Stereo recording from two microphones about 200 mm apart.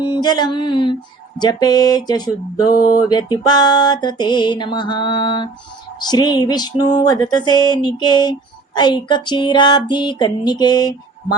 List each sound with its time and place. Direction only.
0.0 s music: 20° left (ahead or behind)
2.7 s a sound: 45° left (ahead or behind)
3.1 s music: 20° left (ahead or behind)